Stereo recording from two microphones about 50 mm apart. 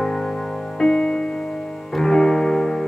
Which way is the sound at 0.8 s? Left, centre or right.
Centre.